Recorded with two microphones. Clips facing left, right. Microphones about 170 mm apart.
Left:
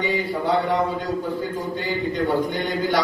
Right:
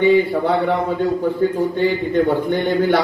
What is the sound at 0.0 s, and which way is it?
Speech, 55° right (ahead or behind).